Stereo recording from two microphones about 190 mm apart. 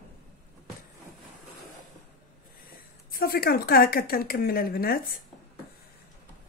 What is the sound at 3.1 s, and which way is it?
A woman's voice, 50° left (ahead or behind).